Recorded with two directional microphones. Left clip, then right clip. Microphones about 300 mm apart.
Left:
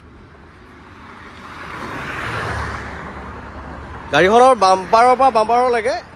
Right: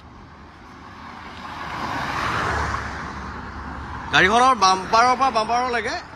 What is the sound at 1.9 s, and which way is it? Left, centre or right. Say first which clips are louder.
Vehicle: right 1 dB; right.